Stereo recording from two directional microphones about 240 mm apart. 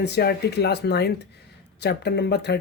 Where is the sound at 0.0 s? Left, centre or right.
Left.